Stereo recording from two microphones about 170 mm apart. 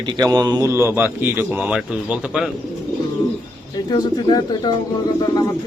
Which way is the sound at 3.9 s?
25° left (ahead or behind).